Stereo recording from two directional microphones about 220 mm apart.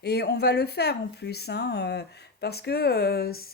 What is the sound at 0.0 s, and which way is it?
Speech, 45° left (ahead or behind).